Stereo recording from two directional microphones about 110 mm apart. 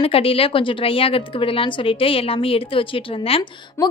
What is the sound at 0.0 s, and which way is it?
A woman's voice, 60° left (ahead or behind).